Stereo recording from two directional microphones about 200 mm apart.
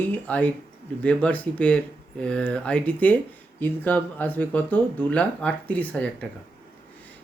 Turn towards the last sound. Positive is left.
turn(degrees=5)  # may be behind; listen again after turning